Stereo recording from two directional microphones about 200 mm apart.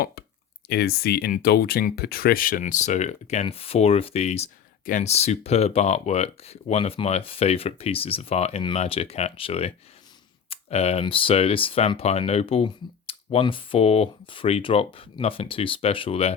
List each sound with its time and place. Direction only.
0.7 s speech: 50° left (ahead or behind); by 16.3 s 30° left (ahead or behind)